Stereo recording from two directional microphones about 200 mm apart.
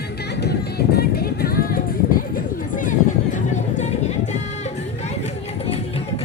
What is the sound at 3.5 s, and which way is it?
Music, 35° left (ahead or behind).